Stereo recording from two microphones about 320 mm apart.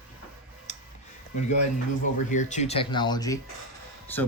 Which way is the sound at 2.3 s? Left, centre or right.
Left.